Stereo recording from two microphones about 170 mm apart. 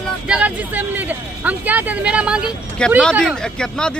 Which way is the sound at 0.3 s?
5° right (ahead or behind).